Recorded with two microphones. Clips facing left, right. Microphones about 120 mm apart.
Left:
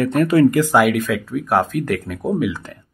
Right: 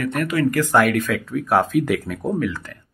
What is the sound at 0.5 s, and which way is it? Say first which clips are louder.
Speech: left 2 dB; 15° left (ahead or behind).